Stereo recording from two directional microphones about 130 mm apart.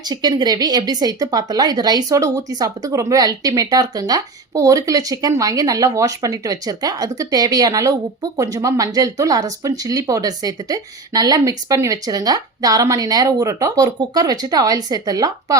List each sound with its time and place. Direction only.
0.0 s speech: 30° right (ahead or behind)